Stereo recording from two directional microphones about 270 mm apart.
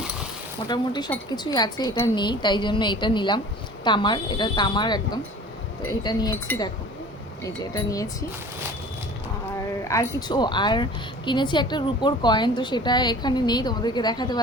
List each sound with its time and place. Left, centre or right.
0.7 s a woman's voice: centre
9.8 s a woman's voice: centre